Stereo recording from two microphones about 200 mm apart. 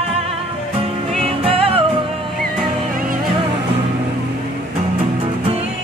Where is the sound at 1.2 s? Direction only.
30° right (ahead or behind).